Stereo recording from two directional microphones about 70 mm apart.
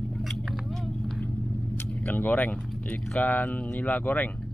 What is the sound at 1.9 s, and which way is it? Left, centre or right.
Vehicle, left.